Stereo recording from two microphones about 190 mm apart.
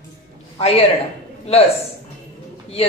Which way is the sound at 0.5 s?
30° left (ahead or behind).